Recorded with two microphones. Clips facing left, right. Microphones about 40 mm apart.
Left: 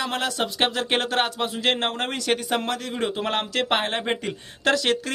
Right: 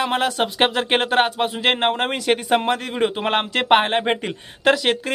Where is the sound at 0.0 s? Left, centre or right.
Right.